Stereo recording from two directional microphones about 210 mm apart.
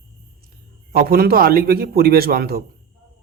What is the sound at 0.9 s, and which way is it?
A man's voice, 45° right (ahead or behind).